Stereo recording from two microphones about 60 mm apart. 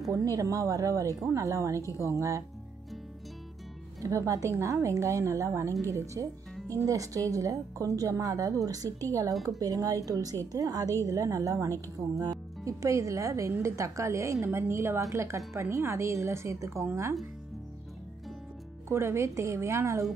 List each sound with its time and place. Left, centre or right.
0.1 s a woman's voice: right
1.3 s a woman's voice: right
1.8 s a woman's voice: left
2.0 s a woman's voice: right
4.0 s a woman's voice: right
9.3 s speech: centre
9.6 s a woman's voice: right
18.9 s speech: right